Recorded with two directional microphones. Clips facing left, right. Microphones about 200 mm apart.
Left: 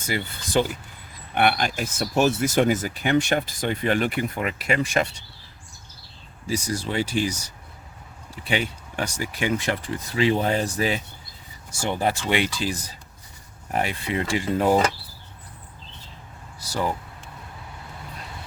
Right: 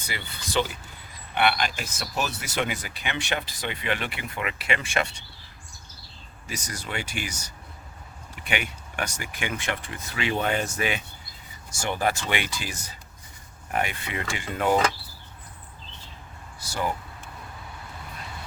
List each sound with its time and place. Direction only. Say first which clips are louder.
0.6 s speech: left 4 dB; 45° left (ahead or behind)
6.5 s speech: left 8 dB; 30° left (ahead or behind)
8.4 s speech: left 5 dB; 30° left (ahead or behind)
16.6 s a sound: left 3 dB; 35° left (ahead or behind)